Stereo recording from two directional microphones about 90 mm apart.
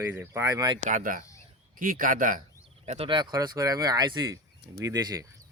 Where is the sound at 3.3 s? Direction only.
40° right (ahead or behind).